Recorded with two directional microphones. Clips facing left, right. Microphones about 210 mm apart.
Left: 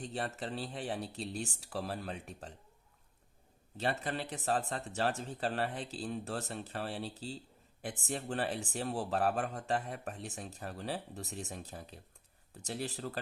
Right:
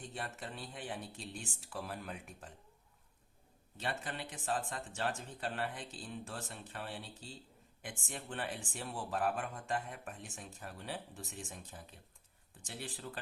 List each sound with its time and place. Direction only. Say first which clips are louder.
0.1 s speech: left 7 dB; 35° left (ahead or behind)
3.8 s speech: left 6 dB; 35° left (ahead or behind)